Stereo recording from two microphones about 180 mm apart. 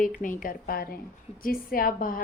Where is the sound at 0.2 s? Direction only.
50° left (ahead or behind).